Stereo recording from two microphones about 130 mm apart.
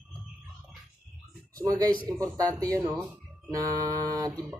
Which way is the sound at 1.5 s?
25° right (ahead or behind).